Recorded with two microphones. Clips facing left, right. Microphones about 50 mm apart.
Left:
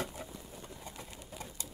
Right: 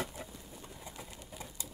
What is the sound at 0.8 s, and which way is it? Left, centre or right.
Pigeon, centre.